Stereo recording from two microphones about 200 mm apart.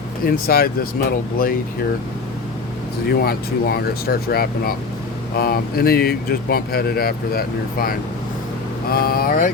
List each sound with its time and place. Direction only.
0.3 s speech: 50° left (ahead or behind)
3.1 s speech: 50° left (ahead or behind)